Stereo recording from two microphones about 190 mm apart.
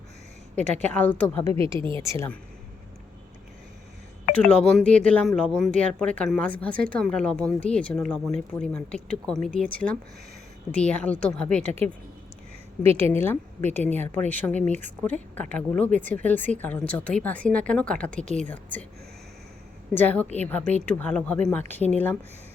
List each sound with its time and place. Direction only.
0.5 s speech: 10° left (ahead or behind)
1.5 s speech: 30° right (ahead or behind)
2.0 s speech: 15° left (ahead or behind)
4.4 s speech: 5° left (ahead or behind)
13.1 s a woman's voice: 10° left (ahead or behind)
14.6 s speech: 40° right (ahead or behind)
15.0 s speech: 10° left (ahead or behind)
19.9 s speech: 10° left (ahead or behind)